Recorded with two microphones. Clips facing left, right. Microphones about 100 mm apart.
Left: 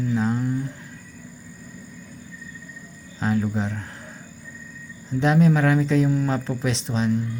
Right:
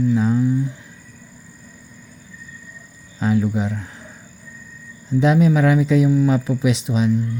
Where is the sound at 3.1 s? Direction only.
15° right (ahead or behind).